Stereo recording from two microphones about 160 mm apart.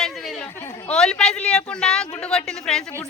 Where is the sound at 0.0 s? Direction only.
Centre (ahead or behind).